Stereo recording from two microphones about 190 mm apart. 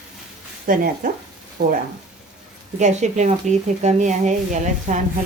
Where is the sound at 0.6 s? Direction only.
45° right (ahead or behind).